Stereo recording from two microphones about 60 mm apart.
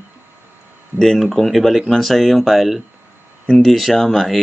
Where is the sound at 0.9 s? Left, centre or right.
Centre.